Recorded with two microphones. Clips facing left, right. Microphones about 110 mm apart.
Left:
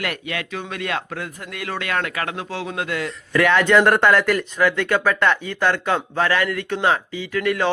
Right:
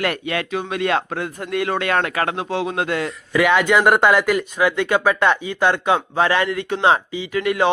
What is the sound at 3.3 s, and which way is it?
Speech, 10° right (ahead or behind).